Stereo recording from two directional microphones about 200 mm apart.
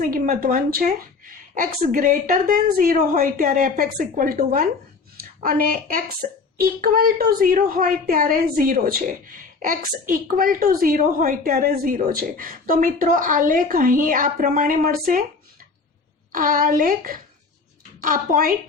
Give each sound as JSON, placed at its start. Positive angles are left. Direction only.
{"t": 0.0, "sound": "a woman's voice", "side_deg": -45}
{"t": 16.3, "sound": "a woman's voice", "side_deg": -45}